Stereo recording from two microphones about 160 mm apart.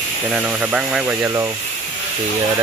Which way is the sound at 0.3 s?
5° right (ahead or behind).